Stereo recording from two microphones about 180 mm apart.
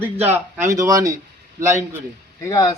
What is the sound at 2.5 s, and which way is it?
Speech, 20° left (ahead or behind).